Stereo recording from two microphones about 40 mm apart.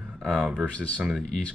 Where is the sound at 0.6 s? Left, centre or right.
Left.